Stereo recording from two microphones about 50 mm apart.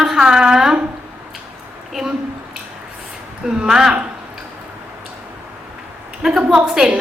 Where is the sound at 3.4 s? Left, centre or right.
Centre.